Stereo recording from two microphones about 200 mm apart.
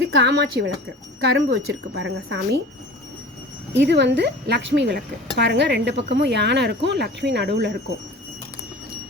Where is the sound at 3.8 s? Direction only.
60° right (ahead or behind).